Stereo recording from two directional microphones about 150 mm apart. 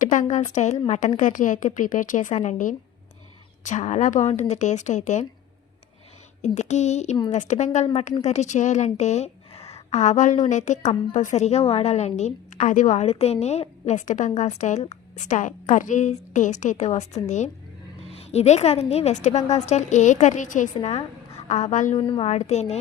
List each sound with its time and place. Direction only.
0.0 s a woman's voice: 60° left (ahead or behind)
6.4 s a woman's voice: 50° left (ahead or behind)
21.9 s a woman's voice: 35° left (ahead or behind)
22.3 s a woman's voice: 50° left (ahead or behind)